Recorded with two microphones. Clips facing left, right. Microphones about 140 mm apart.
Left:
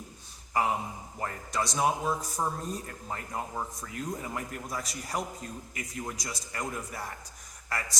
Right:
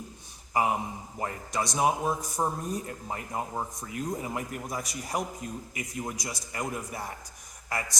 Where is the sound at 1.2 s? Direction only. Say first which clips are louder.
Right 1 dB; 15° right (ahead or behind).